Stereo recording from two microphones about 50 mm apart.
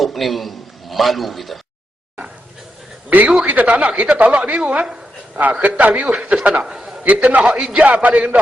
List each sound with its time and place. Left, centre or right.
0.0 s a man's voice: centre
3.1 s a man's voice: right
6.7 s a sound: centre
7.0 s a man's voice: right